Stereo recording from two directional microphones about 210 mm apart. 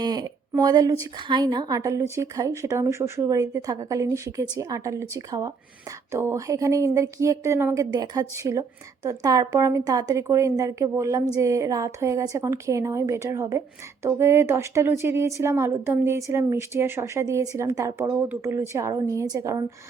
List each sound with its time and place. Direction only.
0.0 s a woman's voice: 20° right (ahead or behind)